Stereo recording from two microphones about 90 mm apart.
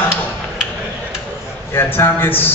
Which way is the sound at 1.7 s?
25° left (ahead or behind).